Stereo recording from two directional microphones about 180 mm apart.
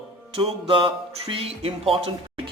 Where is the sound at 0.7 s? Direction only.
30° right (ahead or behind).